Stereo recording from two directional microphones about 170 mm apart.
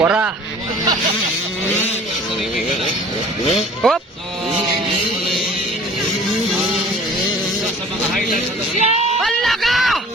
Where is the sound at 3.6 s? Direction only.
Centre (ahead or behind).